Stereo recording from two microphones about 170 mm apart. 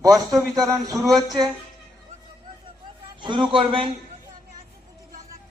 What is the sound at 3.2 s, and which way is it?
Speech, 30° right (ahead or behind).